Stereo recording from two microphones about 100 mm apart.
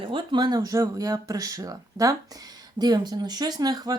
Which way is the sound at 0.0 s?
60° right (ahead or behind).